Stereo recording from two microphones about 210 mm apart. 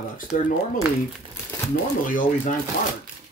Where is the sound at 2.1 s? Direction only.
40° left (ahead or behind).